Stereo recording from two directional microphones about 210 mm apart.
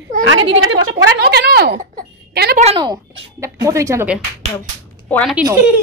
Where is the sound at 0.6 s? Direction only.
65° right (ahead or behind); by 1.8 s 50° right (ahead or behind).